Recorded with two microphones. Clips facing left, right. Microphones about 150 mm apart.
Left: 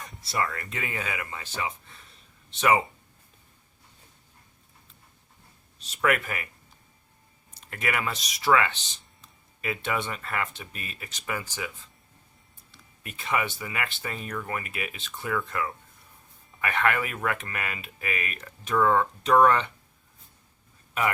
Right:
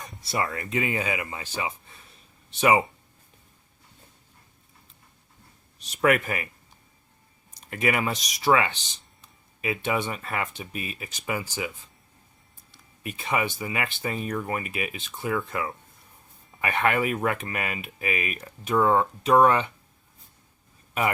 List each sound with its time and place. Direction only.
0.3 s speech: 20° right (ahead or behind)
5.8 s speech: 15° right (ahead or behind)
7.7 s speech: 20° right (ahead or behind)
13.0 s speech: 15° right (ahead or behind)